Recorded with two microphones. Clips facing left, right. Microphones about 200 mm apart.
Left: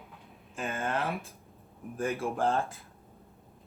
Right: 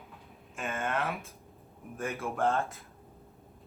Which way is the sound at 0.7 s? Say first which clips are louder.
Even; 35° left (ahead or behind).